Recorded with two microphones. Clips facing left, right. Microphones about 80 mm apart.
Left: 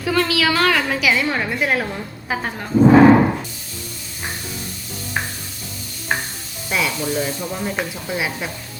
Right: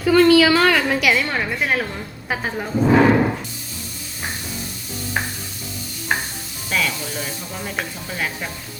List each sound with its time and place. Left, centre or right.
0.0 s a woman's voice: centre
2.9 s music: left
6.7 s sizzle: centre
7.1 s speech: centre